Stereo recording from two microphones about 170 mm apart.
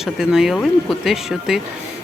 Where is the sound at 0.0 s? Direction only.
5° right (ahead or behind).